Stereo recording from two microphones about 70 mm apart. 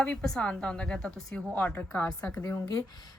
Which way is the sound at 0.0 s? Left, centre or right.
Centre.